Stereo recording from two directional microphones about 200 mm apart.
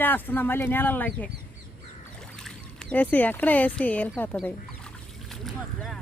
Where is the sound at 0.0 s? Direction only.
10° left (ahead or behind).